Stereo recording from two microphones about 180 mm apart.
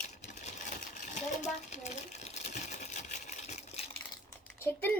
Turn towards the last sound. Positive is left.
turn(degrees=10)  # may be behind; listen again after turning